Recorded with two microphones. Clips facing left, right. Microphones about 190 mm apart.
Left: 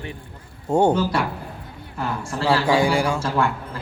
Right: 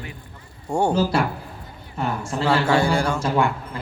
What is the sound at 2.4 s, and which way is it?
Speech, 10° left (ahead or behind).